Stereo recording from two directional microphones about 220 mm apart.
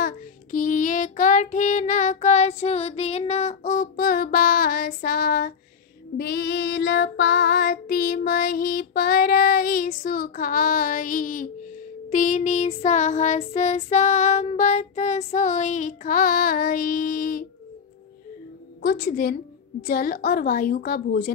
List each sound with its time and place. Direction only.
0.0 s child singing: 40° left (ahead or behind)
18.8 s child singing: 45° left (ahead or behind)